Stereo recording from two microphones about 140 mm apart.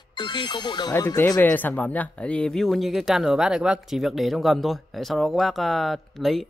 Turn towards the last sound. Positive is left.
turn(degrees=0)  # may be behind; listen again after turning